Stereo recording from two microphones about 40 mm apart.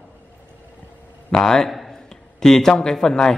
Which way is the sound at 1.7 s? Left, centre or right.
Centre.